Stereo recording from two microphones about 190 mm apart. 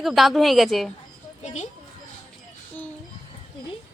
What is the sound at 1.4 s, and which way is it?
Speech, 40° left (ahead or behind).